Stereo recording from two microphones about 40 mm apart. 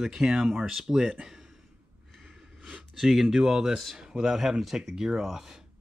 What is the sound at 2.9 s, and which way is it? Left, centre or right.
Speech, centre.